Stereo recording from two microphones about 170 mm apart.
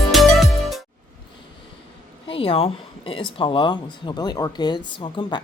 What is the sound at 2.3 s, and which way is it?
Speech, 35° left (ahead or behind).